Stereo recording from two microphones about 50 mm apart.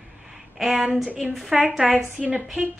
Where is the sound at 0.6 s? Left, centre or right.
Centre.